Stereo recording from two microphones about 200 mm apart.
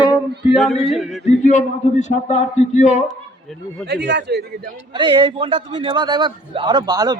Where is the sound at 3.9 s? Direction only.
60° right (ahead or behind).